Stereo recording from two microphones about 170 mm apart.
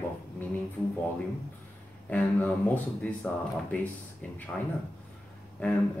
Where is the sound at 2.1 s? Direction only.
10° left (ahead or behind).